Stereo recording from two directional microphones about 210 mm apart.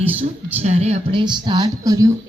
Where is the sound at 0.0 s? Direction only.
25° right (ahead or behind).